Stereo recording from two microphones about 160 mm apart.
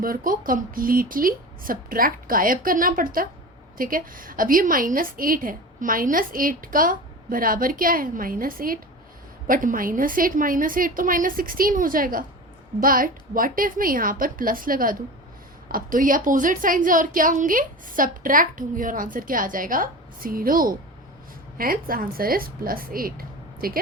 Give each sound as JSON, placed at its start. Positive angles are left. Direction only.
{"t": 0.0, "sound": "a woman's voice", "side_deg": -60}